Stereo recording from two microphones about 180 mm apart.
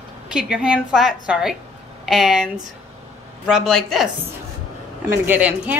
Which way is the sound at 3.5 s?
Centre (ahead or behind).